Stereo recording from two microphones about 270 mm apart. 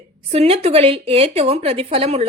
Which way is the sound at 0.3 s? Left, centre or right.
Right.